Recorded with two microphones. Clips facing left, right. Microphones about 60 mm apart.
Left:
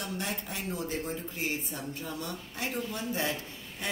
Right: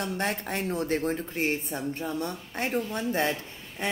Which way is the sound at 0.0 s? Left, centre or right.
Right.